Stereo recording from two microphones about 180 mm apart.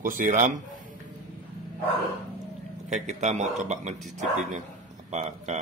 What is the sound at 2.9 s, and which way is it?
A man's voice, 40° right (ahead or behind).